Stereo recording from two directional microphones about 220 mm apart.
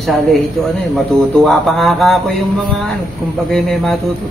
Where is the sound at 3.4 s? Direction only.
Centre (ahead or behind).